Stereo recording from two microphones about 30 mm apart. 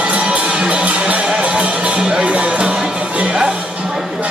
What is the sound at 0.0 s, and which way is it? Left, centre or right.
Music, right.